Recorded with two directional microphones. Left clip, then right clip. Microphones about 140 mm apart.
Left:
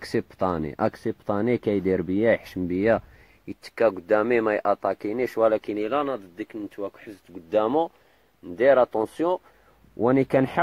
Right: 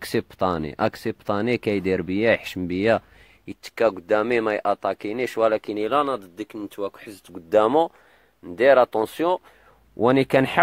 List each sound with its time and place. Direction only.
0.0 s speech: 40° right (ahead or behind)
1.4 s speech: 20° right (ahead or behind)
2.5 s speech: 30° right (ahead or behind)
5.4 s speech: 10° right (ahead or behind)
5.7 s speech: 35° right (ahead or behind)
7.4 s speech: 30° right (ahead or behind)